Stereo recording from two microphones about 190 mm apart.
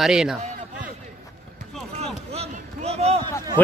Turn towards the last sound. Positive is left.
turn(degrees=10)  # may be behind; listen again after turning